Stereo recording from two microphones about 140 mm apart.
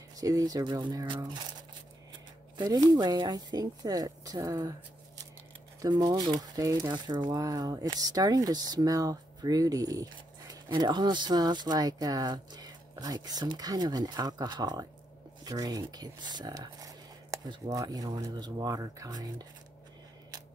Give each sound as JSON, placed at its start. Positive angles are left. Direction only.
{"t": 0.1, "sound": "speech", "side_deg": -25}
{"t": 2.5, "sound": "speech", "side_deg": -30}